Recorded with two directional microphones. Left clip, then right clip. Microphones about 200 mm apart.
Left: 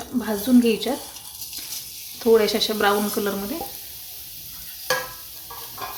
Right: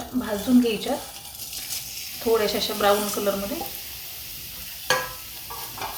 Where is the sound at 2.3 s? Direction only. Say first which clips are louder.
Left 5 dB; 45° left (ahead or behind).